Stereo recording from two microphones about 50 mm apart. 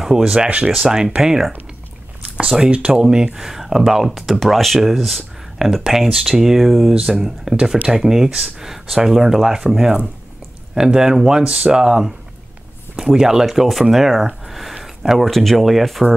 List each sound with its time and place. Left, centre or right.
0.0 s speech: centre
2.2 s a sound: centre
2.6 s speech: right; by 6.9 s centre
6.9 s speech: centre